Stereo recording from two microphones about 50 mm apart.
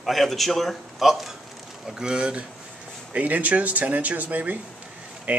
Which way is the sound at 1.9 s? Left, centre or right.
Centre.